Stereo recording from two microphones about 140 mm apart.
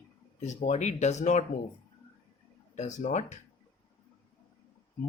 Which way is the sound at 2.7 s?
60° left (ahead or behind).